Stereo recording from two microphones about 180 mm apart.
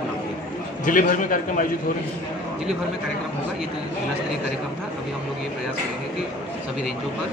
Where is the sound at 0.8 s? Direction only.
45° left (ahead or behind).